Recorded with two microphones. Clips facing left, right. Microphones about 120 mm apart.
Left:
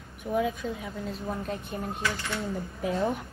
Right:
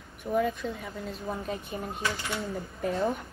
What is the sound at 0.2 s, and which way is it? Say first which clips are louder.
Speech: even; centre (ahead or behind).